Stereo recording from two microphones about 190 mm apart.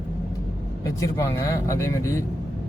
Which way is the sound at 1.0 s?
15° left (ahead or behind).